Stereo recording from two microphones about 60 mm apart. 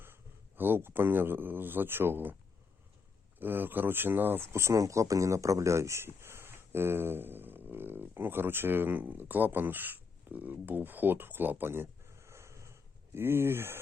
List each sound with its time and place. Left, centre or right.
0.0 s speech: right
3.3 s speech: right
4.5 s speech: right
13.1 s speech: right